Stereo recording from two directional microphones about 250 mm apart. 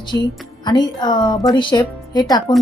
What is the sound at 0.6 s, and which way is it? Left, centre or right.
A woman's voice, centre.